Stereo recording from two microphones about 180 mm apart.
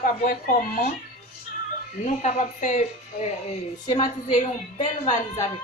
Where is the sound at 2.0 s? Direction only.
40° left (ahead or behind).